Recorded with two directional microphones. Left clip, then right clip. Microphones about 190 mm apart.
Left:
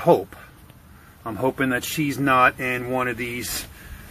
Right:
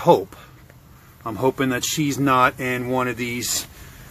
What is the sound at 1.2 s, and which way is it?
Speech, 15° right (ahead or behind).